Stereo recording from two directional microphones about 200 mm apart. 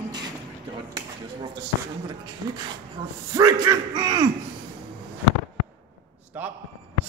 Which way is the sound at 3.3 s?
20° right (ahead or behind).